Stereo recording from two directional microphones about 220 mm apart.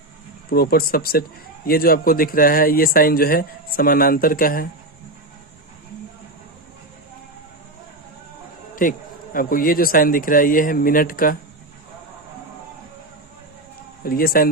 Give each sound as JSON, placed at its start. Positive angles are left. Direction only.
{"t": 0.5, "sound": "speech", "side_deg": 45}
{"t": 8.7, "sound": "speech", "side_deg": 40}
{"t": 14.0, "sound": "speech", "side_deg": 40}